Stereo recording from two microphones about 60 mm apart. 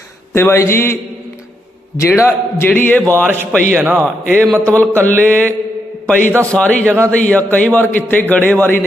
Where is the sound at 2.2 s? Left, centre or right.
Left.